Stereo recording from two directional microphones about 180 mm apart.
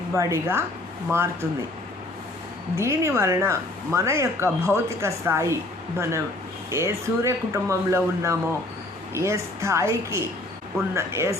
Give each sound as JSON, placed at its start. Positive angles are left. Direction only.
{"t": 0.2, "sound": "speech", "side_deg": -15}
{"t": 2.7, "sound": "speech", "side_deg": -15}